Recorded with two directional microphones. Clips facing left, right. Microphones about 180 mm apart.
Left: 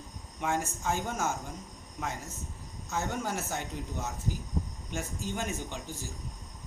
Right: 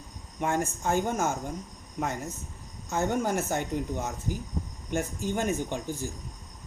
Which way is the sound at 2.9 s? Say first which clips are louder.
Right 6 dB; 55° right (ahead or behind).